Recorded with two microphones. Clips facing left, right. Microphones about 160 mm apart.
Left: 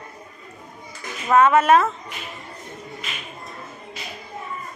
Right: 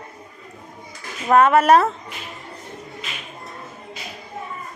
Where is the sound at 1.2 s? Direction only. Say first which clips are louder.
Right 1 dB; 40° right (ahead or behind).